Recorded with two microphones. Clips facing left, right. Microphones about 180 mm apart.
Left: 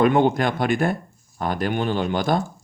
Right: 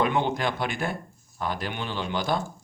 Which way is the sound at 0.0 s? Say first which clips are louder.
Left 7 dB; 50° left (ahead or behind).